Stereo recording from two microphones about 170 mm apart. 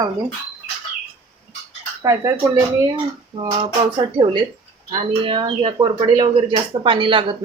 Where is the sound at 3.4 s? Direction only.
30° right (ahead or behind).